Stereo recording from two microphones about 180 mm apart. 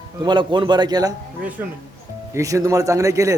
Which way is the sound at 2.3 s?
20° right (ahead or behind).